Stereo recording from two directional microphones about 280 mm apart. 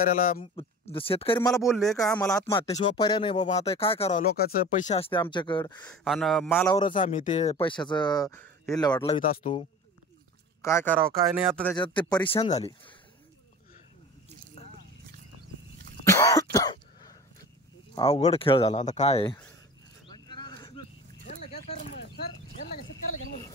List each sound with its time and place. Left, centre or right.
0.0 s speech: left
1.5 s a man's voice: centre
2.5 s speech: centre
5.9 s a man's voice: centre
7.0 s speech: left
9.2 s speech: left
10.6 s a man's voice: centre
11.8 s speech: centre
16.1 s cough: centre
17.9 s speech: left
20.1 s a sound: centre